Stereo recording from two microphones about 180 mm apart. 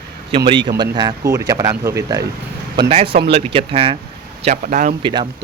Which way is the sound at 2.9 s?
30° right (ahead or behind).